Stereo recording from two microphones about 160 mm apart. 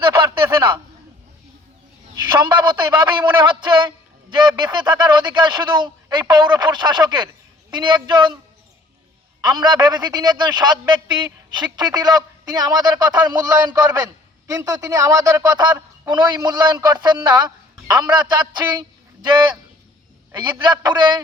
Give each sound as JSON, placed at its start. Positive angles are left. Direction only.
{"t": 2.4, "sound": "a man's voice", "side_deg": -30}
{"t": 9.4, "sound": "a man's voice", "side_deg": -25}